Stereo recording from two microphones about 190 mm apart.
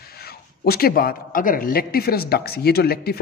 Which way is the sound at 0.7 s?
50° left (ahead or behind).